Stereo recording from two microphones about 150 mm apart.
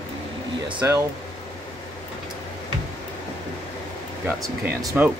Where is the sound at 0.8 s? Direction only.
20° right (ahead or behind).